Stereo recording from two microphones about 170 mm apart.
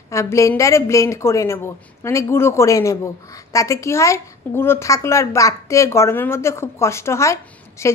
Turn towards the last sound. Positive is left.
turn(degrees=15)  # may be behind; listen again after turning